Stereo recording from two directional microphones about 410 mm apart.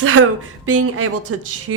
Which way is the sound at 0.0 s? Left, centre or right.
Right.